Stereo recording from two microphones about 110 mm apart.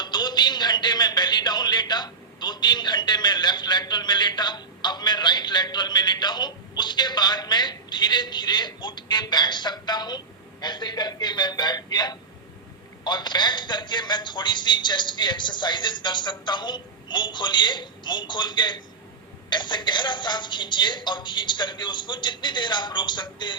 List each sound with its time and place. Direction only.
0.0 s a man's voice: 40° left (ahead or behind)